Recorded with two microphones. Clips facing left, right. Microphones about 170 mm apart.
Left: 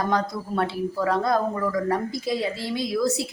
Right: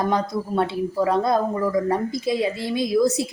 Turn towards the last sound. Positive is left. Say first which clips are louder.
# right 5 dB
turn(degrees=-20)  # may be behind; listen again after turning